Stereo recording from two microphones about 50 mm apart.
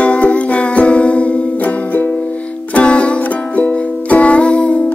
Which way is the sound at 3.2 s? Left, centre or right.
Left.